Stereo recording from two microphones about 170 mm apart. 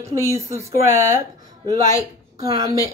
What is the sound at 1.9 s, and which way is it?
Speech, 20° right (ahead or behind).